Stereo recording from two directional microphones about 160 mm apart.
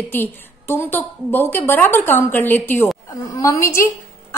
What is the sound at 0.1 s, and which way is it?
A woman's voice, 15° left (ahead or behind).